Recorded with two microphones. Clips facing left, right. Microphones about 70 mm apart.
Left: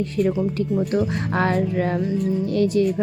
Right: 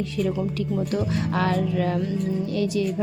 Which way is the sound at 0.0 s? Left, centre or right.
Left.